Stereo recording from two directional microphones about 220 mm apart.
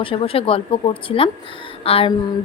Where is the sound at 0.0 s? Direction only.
25° left (ahead or behind).